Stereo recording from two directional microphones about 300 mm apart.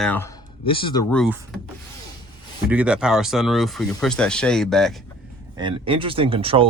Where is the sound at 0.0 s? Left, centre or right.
Centre.